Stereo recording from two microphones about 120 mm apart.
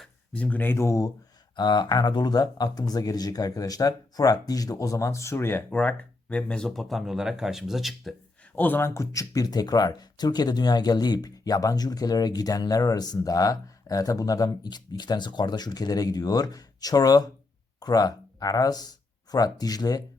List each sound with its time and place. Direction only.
0.0 s speech: 10° left (ahead or behind); by 1.1 s 25° left (ahead or behind)
1.5 s speech: 40° left (ahead or behind); by 8.1 s centre (ahead or behind)
8.5 s speech: 15° left (ahead or behind); by 20.1 s 30° left (ahead or behind)